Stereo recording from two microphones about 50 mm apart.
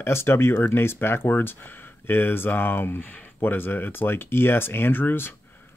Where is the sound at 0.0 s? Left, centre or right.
Left.